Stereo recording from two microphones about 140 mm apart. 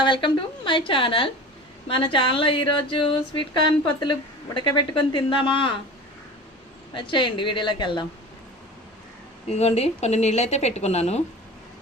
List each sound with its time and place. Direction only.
0.0 s a woman's voice: 35° left (ahead or behind)
6.9 s a woman's voice: 35° left (ahead or behind)
9.5 s a woman's voice: 50° left (ahead or behind)